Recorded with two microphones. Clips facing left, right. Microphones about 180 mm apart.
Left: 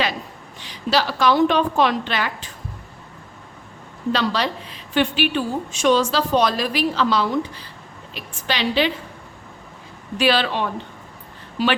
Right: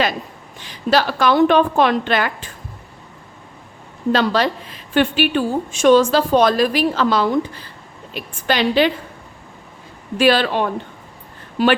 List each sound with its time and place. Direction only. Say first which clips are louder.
0.6 s a woman's voice: right 4 dB; 50° right (ahead or behind)
4.1 s a woman's voice: right 5 dB; 50° right (ahead or behind)
10.2 s a woman's voice: right 4 dB; 50° right (ahead or behind)